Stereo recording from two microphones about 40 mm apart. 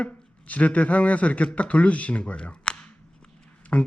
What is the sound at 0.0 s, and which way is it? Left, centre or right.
Speech, left.